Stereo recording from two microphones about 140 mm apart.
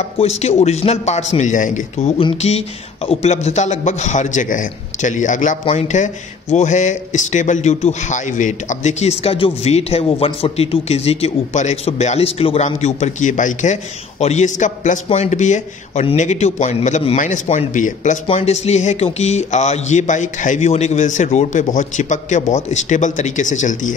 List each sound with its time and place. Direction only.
0.2 s speech: 50° left (ahead or behind)
18.2 s speech: 45° left (ahead or behind)